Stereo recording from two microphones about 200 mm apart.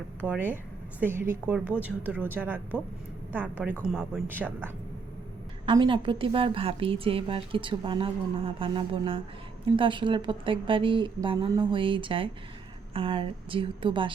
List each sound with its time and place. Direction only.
0.2 s a woman's voice: 10° right (ahead or behind)
5.6 s a woman's voice: 25° right (ahead or behind)